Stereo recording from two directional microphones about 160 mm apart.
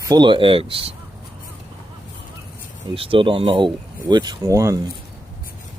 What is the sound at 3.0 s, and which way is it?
Speech, 35° right (ahead or behind).